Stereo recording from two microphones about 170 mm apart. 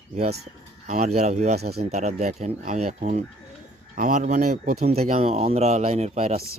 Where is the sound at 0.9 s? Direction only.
40° right (ahead or behind).